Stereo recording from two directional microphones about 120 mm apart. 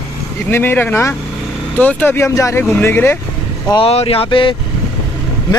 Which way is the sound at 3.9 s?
55° left (ahead or behind).